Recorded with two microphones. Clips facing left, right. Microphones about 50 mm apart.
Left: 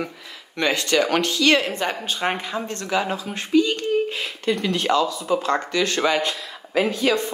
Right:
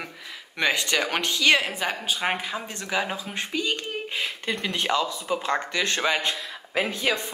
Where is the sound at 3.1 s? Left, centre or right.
Right.